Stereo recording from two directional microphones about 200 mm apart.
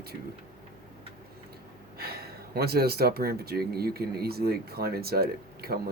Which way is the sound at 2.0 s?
50° right (ahead or behind).